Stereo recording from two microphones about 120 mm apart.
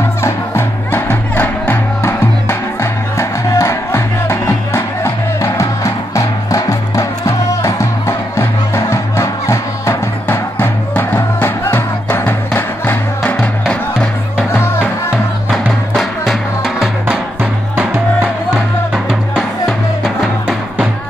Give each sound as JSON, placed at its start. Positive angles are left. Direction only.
{"t": 0.2, "sound": "music", "side_deg": 20}
{"t": 15.9, "sound": "music", "side_deg": 0}
{"t": 20.0, "sound": "music", "side_deg": -10}